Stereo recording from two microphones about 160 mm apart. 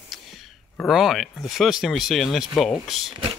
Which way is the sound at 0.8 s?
Centre (ahead or behind).